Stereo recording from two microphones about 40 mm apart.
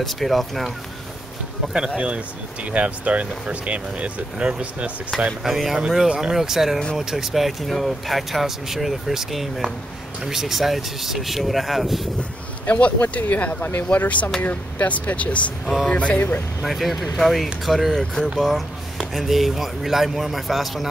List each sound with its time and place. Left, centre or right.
0.0 s speech: centre
2.0 s speech: right
5.4 s speech: centre
12.6 s speech: left
15.6 s vehicle: centre
15.9 s speech: left
16.2 s speech: left
16.6 s speech: centre